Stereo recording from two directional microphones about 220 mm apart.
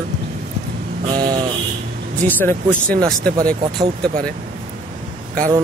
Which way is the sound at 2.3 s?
10° left (ahead or behind).